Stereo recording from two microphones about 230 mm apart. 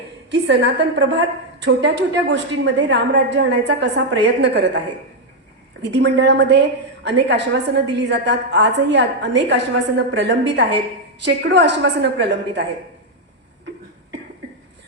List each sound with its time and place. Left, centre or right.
0.3 s a woman's voice: right
5.8 s a woman's voice: right